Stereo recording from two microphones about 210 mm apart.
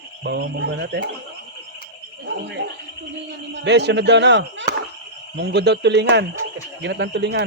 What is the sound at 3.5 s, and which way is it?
Speech, 55° right (ahead or behind).